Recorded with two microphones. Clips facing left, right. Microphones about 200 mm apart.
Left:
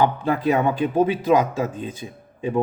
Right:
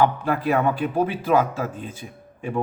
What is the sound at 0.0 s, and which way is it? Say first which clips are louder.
Speech: left 1 dB; 20° left (ahead or behind).